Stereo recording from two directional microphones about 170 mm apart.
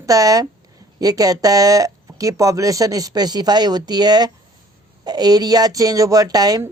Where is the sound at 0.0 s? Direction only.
20° right (ahead or behind).